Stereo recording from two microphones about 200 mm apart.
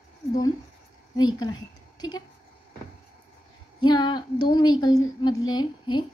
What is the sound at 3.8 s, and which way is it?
A woman's voice, 20° left (ahead or behind).